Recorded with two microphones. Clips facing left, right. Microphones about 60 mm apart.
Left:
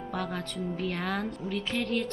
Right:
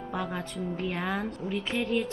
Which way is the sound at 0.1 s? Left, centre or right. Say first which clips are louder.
Right 1 dB; centre.